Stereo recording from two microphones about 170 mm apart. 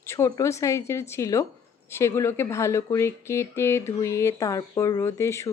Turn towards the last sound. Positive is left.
turn(degrees=15)  # may be behind; listen again after turning